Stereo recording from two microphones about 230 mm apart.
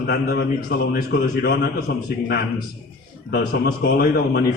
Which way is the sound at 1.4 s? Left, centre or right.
Left.